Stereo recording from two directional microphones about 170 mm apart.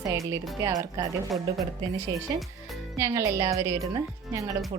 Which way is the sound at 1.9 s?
20° right (ahead or behind).